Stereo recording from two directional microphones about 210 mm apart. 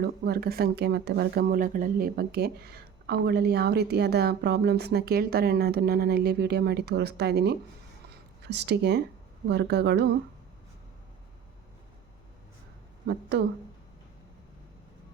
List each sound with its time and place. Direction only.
0.0 s speech: 50° right (ahead or behind)
13.1 s speech: 55° right (ahead or behind)